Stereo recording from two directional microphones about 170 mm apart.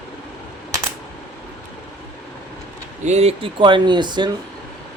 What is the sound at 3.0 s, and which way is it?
Speech, 40° right (ahead or behind).